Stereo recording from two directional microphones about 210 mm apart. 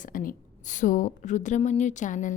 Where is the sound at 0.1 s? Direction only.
40° left (ahead or behind).